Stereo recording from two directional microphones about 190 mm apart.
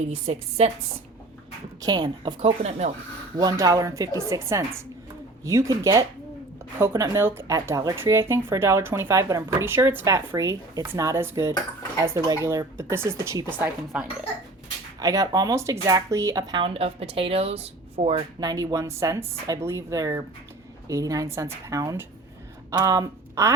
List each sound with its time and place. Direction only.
0.3 s speech: 35° right (ahead or behind)
1.8 s speech: 20° right (ahead or behind)
2.4 s speech: 35° right (ahead or behind)
3.4 s a woman's voice: 20° right (ahead or behind)
13.6 s speech: 5° right (ahead or behind)
14.9 s speech: 20° right (ahead or behind)
18.4 s a woman's voice: 15° right (ahead or behind)